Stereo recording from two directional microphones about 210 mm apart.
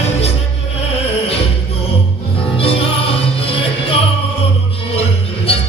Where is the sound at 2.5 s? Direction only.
25° left (ahead or behind).